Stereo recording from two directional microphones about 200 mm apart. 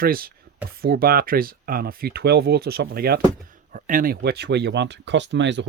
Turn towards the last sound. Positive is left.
turn(degrees=-60)  # may be behind; listen again after turning